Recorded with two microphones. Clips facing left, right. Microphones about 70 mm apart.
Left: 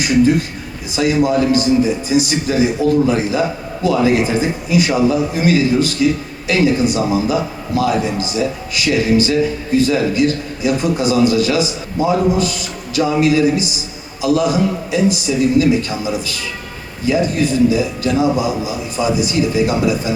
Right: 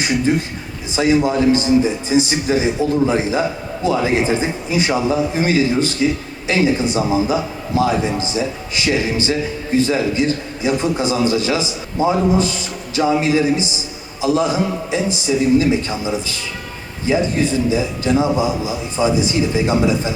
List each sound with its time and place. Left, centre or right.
0.0 s a man's voice: right